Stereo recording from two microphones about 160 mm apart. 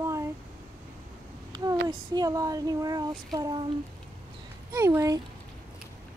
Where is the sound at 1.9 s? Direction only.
25° right (ahead or behind).